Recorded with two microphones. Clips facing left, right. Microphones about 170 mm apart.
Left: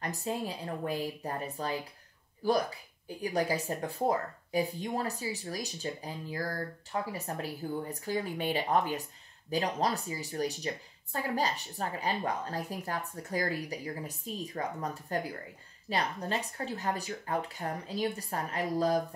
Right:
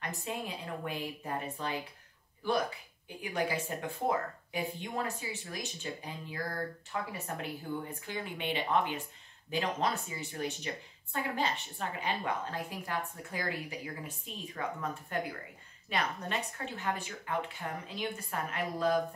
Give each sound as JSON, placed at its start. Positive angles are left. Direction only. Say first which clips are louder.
{"t": 0.0, "sound": "a woman's voice", "louder": "left 4 dB", "side_deg": 35}